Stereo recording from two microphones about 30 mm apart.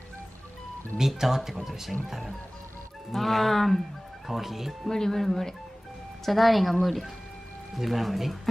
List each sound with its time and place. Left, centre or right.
0.9 s speech: centre
3.2 s speech: centre
4.3 s speech: centre
4.8 s speech: centre
6.2 s speech: centre